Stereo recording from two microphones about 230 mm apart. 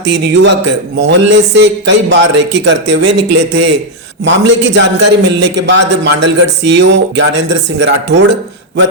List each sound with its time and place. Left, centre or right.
0.0 s a man's voice: right